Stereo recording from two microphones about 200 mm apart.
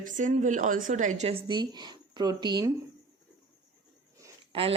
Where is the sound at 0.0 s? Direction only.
40° right (ahead or behind); by 2.7 s 20° right (ahead or behind).